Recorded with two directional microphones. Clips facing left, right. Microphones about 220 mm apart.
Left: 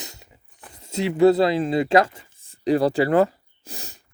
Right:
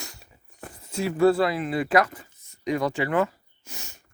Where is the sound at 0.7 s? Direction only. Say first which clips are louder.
Left 3 dB; 25° left (ahead or behind).